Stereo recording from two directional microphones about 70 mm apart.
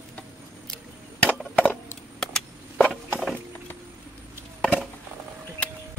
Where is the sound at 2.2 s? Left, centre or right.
Centre.